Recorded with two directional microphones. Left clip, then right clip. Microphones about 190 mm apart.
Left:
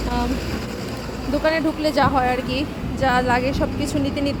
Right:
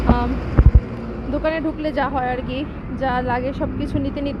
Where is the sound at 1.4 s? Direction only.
15° left (ahead or behind).